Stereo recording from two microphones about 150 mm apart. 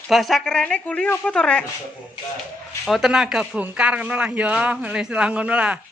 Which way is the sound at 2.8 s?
Centre (ahead or behind).